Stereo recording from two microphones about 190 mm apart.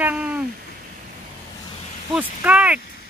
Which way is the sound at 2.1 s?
5° right (ahead or behind).